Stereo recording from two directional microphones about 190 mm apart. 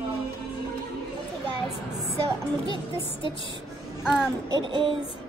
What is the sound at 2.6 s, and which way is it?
Speech, 25° left (ahead or behind).